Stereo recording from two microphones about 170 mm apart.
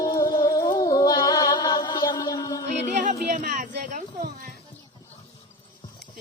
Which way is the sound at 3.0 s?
50° right (ahead or behind).